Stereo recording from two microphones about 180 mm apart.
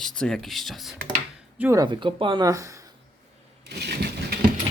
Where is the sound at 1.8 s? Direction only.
30° right (ahead or behind).